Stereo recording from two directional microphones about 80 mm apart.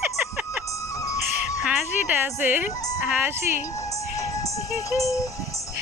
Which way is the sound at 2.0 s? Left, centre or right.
Right.